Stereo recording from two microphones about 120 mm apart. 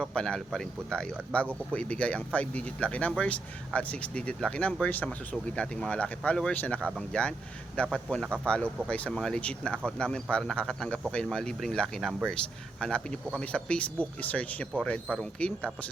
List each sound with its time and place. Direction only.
0.0 s speech: 5° left (ahead or behind)